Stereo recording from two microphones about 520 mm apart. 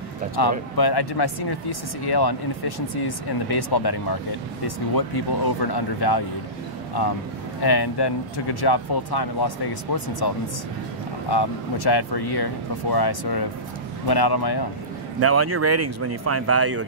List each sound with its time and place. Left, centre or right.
0.4 s speech: left
7.6 s speech: left
15.1 s speech: right